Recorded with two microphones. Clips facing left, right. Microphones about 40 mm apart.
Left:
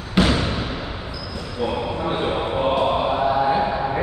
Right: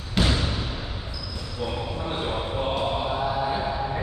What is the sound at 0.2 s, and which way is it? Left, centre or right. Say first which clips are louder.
Basketball bounce: left 5 dB; left.